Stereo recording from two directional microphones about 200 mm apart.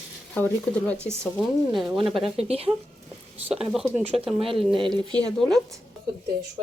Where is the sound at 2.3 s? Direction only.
30° right (ahead or behind).